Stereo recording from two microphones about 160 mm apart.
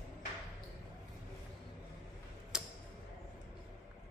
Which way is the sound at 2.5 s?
5° right (ahead or behind).